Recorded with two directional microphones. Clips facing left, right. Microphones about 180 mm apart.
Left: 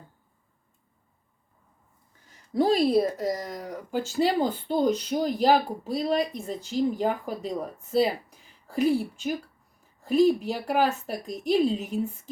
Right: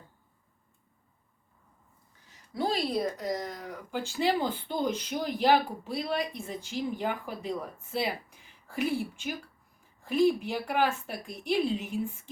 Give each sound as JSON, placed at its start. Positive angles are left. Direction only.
{"t": 3.2, "sound": "speech", "side_deg": 45}